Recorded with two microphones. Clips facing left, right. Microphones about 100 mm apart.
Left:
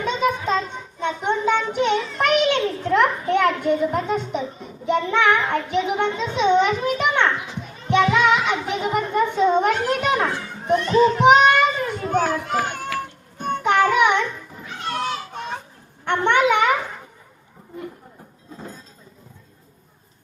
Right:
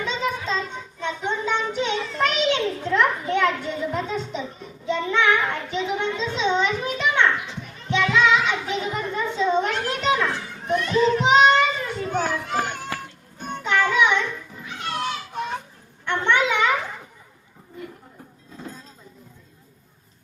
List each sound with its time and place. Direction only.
0.0 s child singing: 55° left (ahead or behind)
3.3 s a sound: 55° left (ahead or behind)
4.9 s child singing: 55° left (ahead or behind)
7.0 s children playing: 55° left (ahead or behind)
7.9 s music: 55° left (ahead or behind)
10.7 s children playing: 35° left (ahead or behind)
11.2 s children playing: 55° left (ahead or behind)
13.4 s music: 50° left (ahead or behind)
16.0 s a sound: 55° left (ahead or behind)